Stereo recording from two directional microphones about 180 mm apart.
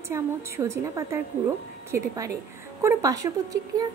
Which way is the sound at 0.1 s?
15° right (ahead or behind).